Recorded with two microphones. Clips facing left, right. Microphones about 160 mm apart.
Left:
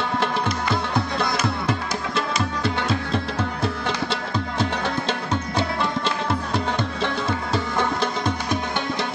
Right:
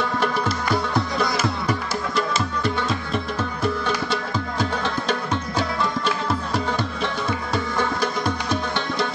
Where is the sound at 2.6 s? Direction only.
30° left (ahead or behind).